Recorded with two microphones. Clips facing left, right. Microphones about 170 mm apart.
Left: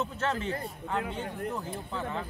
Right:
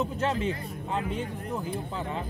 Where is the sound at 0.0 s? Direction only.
15° right (ahead or behind).